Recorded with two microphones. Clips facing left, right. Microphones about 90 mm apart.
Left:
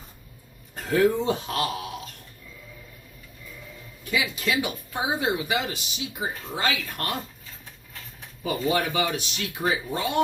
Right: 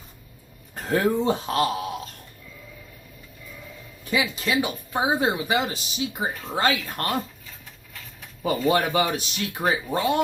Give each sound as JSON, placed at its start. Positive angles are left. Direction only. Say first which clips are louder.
{"t": 0.9, "sound": "speech", "louder": "even", "side_deg": -40}
{"t": 4.1, "sound": "speech", "louder": "right 2 dB", "side_deg": -30}
{"t": 8.4, "sound": "speech", "louder": "right 3 dB", "side_deg": -40}